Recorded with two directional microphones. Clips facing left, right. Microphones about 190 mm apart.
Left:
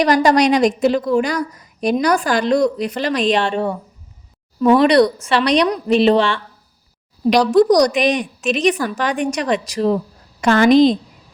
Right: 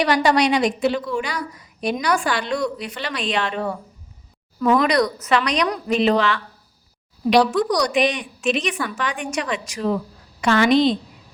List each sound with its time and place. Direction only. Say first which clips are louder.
0.0 s a woman's voice: left 4 dB; 40° left (ahead or behind)
7.5 s a woman's voice: left 8 dB; 40° left (ahead or behind)